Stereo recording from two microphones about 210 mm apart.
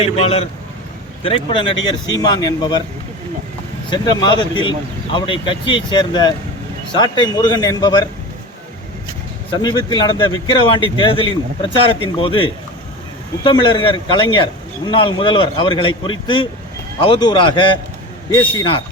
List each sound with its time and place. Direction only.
0.0 s speech: 30° left (ahead or behind)
3.8 s speech: 20° left (ahead or behind)
9.5 s speech: 20° left (ahead or behind)